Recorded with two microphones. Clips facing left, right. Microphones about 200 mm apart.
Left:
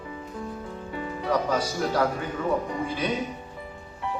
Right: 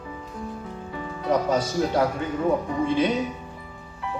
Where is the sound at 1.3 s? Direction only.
25° right (ahead or behind).